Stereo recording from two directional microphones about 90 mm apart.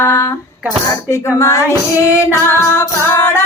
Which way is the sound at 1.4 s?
35° left (ahead or behind).